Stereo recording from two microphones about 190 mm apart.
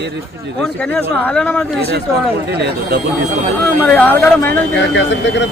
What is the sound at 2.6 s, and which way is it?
Speech, 60° right (ahead or behind).